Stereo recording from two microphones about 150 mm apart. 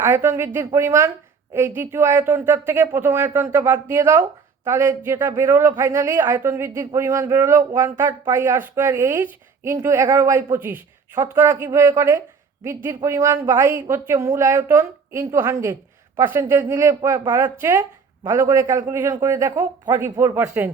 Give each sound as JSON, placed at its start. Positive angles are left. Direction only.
{"t": 0.0, "sound": "a woman's voice", "side_deg": -15}